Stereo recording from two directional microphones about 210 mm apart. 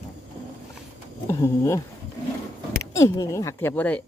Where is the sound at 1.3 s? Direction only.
15° left (ahead or behind).